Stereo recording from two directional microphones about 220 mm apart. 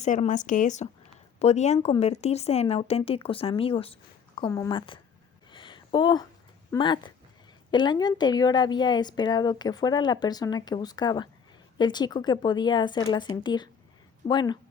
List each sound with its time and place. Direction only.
0.0 s a woman's voice: 35° left (ahead or behind)
5.5 s a sound: 20° left (ahead or behind)
6.7 s a woman's voice: 20° left (ahead or behind)